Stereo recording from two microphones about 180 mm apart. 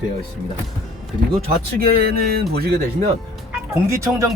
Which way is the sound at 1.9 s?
60° right (ahead or behind).